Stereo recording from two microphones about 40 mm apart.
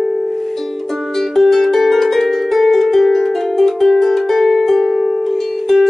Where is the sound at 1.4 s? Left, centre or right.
Centre.